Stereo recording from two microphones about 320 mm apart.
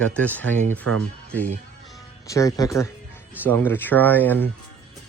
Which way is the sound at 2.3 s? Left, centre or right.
Centre.